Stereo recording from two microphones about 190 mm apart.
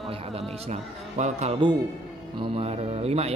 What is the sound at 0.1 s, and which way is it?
A man's voice, 30° right (ahead or behind).